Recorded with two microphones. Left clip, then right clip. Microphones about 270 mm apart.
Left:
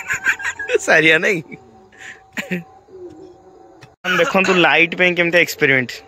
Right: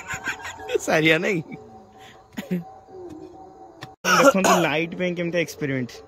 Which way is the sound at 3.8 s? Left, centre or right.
Right.